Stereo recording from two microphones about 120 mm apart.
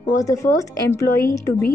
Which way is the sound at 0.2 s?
25° left (ahead or behind).